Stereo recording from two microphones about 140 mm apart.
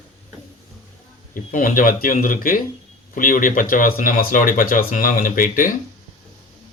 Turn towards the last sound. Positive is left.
turn(degrees=75)  # may be behind; listen again after turning